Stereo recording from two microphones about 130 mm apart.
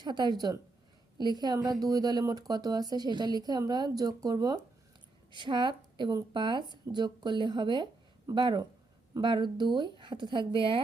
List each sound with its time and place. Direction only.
0.0 s speech: 35° right (ahead or behind)